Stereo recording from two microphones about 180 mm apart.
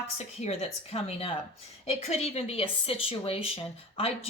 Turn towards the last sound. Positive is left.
turn(degrees=35)  # may be behind; listen again after turning